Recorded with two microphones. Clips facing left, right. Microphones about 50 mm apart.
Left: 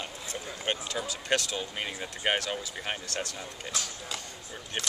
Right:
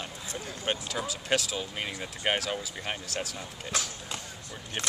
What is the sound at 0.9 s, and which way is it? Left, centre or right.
Speech, centre.